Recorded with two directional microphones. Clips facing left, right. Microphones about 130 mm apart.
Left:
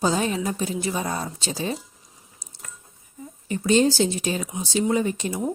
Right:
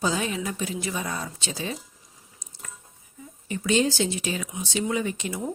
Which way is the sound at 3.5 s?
35° left (ahead or behind).